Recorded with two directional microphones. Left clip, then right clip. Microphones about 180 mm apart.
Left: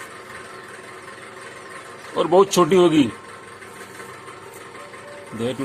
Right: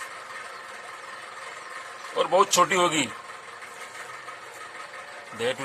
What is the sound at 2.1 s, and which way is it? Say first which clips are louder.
Speech: left 5 dB; centre (ahead or behind).